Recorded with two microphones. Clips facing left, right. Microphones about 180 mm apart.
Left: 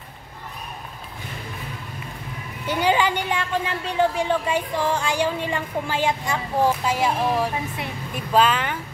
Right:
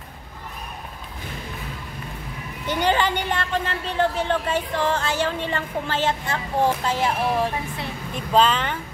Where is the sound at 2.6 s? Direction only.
10° left (ahead or behind).